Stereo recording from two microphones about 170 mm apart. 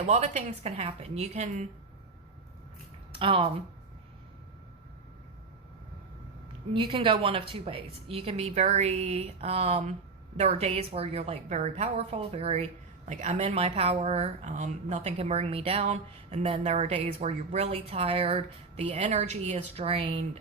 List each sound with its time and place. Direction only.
0.1 s speech: 40° right (ahead or behind)
3.1 s speech: 30° right (ahead or behind)
6.7 s speech: 30° right (ahead or behind)